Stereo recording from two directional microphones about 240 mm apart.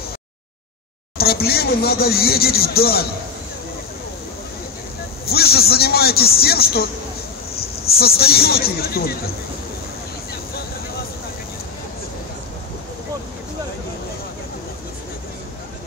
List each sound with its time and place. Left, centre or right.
1.1 s speech: left
5.2 s speech: left